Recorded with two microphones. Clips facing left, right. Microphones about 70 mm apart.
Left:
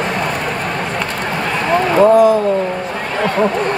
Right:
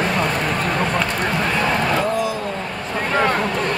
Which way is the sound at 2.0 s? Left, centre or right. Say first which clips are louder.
Left 12 dB; left.